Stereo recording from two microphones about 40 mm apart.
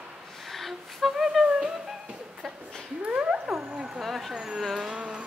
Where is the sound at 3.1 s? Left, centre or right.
Right.